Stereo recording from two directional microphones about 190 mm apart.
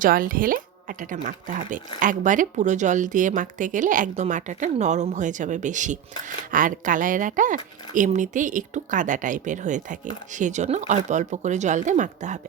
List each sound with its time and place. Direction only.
0.0 s a woman's voice: 45° right (ahead or behind)